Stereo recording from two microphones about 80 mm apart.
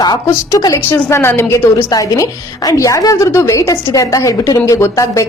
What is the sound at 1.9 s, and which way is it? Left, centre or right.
A woman's voice, left.